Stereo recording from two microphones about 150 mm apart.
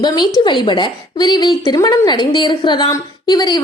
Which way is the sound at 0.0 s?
30° left (ahead or behind).